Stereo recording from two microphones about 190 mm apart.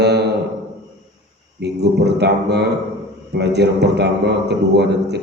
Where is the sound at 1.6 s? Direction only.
60° right (ahead or behind).